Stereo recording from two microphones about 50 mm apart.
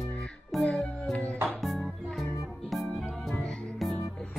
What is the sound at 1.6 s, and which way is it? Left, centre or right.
Music, centre.